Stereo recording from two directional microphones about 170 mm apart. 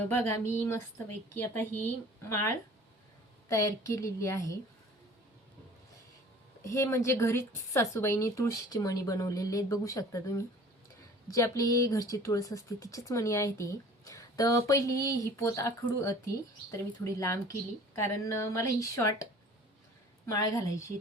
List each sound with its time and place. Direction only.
0.1 s a woman's voice: 15° left (ahead or behind)
3.5 s a woman's voice: 20° left (ahead or behind)
6.6 s a woman's voice: 15° left (ahead or behind)